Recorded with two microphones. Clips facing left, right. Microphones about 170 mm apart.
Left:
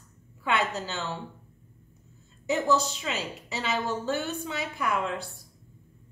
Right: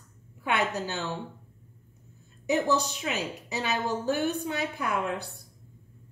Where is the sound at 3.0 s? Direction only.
20° right (ahead or behind).